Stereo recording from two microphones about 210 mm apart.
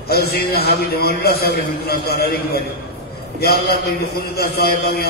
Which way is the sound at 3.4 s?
50° left (ahead or behind).